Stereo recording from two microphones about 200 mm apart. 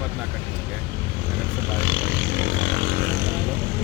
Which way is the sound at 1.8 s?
70° right (ahead or behind).